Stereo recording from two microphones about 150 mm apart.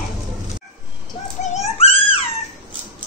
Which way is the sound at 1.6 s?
40° left (ahead or behind).